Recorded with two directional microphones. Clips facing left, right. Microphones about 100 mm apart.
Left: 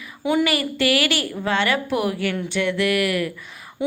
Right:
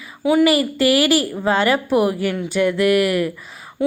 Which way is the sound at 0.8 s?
35° right (ahead or behind).